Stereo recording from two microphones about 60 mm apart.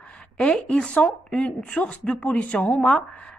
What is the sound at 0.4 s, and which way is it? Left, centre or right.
A woman's voice, centre.